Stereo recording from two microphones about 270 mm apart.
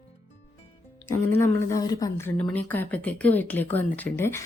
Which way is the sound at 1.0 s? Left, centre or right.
Centre.